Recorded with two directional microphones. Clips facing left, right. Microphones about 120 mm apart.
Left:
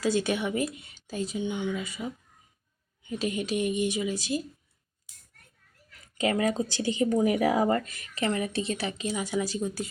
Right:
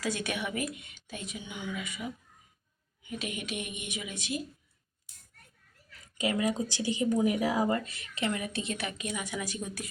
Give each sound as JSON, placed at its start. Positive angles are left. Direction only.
{"t": 0.0, "sound": "a woman's voice", "side_deg": 30}
{"t": 6.1, "sound": "a woman's voice", "side_deg": 55}